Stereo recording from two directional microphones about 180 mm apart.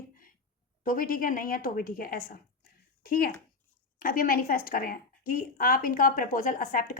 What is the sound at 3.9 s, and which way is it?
Speech, 50° left (ahead or behind).